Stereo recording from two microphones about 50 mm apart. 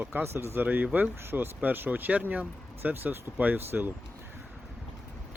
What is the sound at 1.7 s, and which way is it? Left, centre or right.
Speech, right.